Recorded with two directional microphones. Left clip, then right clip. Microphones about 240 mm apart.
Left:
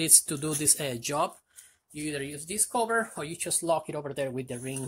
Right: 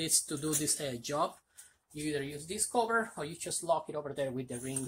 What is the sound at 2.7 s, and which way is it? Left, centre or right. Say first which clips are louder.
Speech: left 3 dB; left.